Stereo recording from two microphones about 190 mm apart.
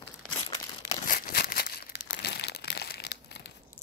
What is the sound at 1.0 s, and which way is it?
Crumpling, 50° left (ahead or behind).